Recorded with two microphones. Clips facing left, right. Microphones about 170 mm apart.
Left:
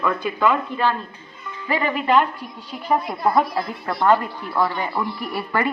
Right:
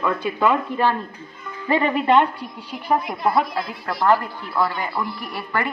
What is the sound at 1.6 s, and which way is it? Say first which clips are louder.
Speech: right 3 dB; 25° right (ahead or behind).